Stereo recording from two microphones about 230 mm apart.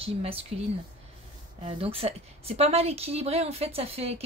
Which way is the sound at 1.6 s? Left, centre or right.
Right.